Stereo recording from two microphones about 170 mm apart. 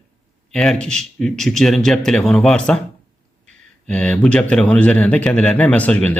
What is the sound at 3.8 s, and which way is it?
Speech, 5° left (ahead or behind).